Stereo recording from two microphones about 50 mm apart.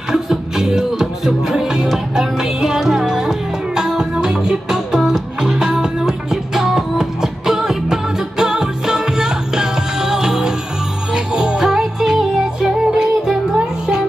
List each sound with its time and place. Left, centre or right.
0.1 s music: centre